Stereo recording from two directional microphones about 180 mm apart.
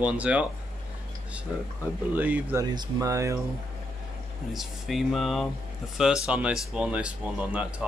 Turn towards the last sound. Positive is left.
turn(degrees=-5)  # may be behind; listen again after turning